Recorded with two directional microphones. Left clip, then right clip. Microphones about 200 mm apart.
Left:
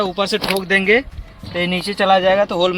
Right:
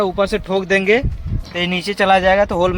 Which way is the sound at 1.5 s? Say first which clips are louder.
Right 1 dB; 25° right (ahead or behind).